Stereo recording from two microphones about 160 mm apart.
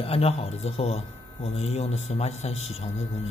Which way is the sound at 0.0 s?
40° left (ahead or behind).